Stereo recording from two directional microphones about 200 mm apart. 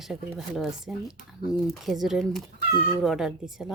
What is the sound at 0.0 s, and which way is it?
Speech, centre (ahead or behind).